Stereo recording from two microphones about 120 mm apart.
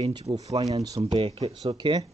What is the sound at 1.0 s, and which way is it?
Speech, 50° right (ahead or behind).